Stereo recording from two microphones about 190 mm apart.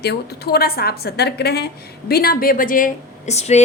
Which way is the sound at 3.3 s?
35° left (ahead or behind).